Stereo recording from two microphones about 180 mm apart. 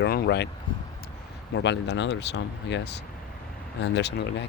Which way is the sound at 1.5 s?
75° left (ahead or behind).